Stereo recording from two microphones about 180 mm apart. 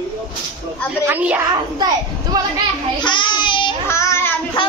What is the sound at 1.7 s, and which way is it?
Speech, 20° right (ahead or behind).